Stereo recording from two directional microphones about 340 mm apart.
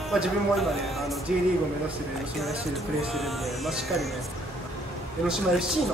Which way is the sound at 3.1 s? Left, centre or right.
Centre.